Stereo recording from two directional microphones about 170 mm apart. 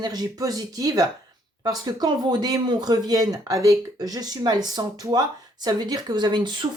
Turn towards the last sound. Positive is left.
turn(degrees=-25)  # may be behind; listen again after turning